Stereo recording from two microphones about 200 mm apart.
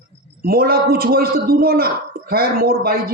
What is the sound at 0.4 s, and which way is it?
Speech, 50° right (ahead or behind).